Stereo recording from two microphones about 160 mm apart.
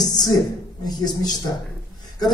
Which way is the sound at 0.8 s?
25° left (ahead or behind).